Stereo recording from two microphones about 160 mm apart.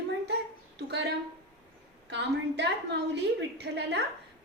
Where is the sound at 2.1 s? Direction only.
90° right.